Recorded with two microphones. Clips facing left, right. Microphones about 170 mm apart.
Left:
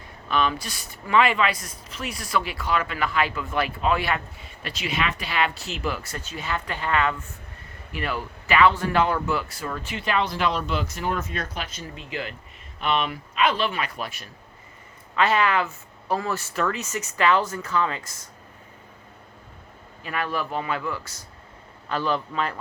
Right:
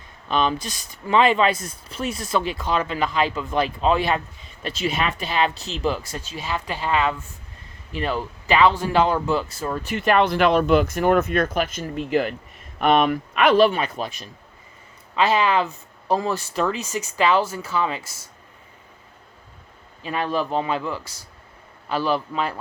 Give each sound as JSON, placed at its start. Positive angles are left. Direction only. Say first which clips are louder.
{"t": 0.3, "sound": "speech", "louder": "right 2 dB", "side_deg": -25}
{"t": 9.2, "sound": "speech", "louder": "right 4 dB", "side_deg": -25}
{"t": 9.9, "sound": "speech", "louder": "right 7 dB", "side_deg": -50}
{"t": 13.7, "sound": "speech", "louder": "right 5 dB", "side_deg": -30}
{"t": 20.0, "sound": "speech", "louder": "right 4 dB", "side_deg": -25}